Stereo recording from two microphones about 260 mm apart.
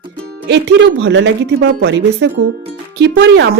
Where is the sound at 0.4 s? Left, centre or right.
Right.